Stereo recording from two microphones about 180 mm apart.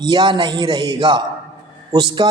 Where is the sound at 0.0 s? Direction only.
25° right (ahead or behind).